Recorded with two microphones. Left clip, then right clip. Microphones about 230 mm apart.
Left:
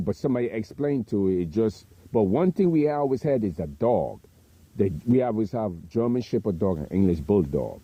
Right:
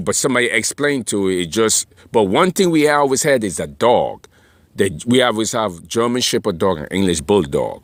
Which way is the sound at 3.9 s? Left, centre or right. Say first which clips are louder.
Right 9 dB; right.